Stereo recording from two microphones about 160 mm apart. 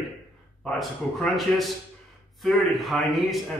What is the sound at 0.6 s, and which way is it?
A man's voice, centre (ahead or behind).